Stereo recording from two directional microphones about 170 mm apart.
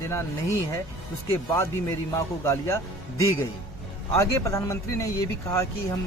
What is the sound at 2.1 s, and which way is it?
Speech, 15° left (ahead or behind).